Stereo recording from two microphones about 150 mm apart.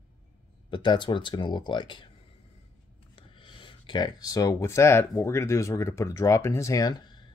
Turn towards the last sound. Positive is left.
turn(degrees=25)  # may be behind; listen again after turning